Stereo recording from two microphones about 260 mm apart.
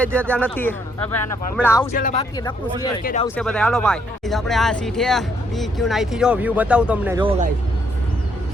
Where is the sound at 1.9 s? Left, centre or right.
Left.